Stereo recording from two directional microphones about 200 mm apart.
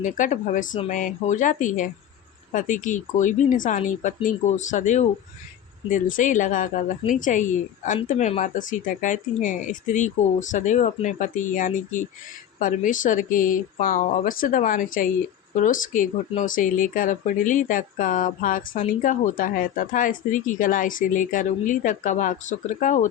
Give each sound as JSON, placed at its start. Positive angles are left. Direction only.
{"t": 0.0, "sound": "speech", "side_deg": 40}